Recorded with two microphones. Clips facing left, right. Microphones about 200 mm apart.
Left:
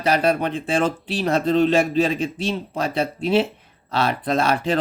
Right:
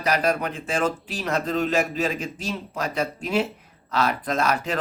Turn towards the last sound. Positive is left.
turn(degrees=30)  # may be behind; listen again after turning